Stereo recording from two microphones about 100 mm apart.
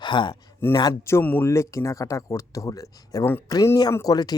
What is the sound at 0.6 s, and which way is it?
Speech, 20° left (ahead or behind).